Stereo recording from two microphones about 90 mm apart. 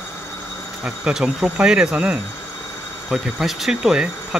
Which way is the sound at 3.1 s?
Centre (ahead or behind).